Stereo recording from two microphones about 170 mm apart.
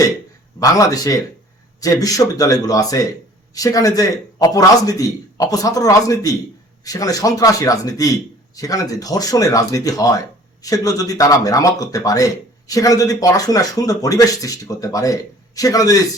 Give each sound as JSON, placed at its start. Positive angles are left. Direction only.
{"t": 0.6, "sound": "speech", "side_deg": 20}